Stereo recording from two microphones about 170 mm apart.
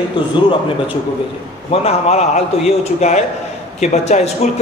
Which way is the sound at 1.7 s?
40° left (ahead or behind).